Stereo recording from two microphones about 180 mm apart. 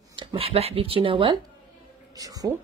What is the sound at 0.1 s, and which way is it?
A woman's voice, 25° right (ahead or behind).